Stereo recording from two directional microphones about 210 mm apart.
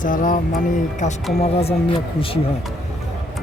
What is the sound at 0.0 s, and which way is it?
Speech, 40° left (ahead or behind).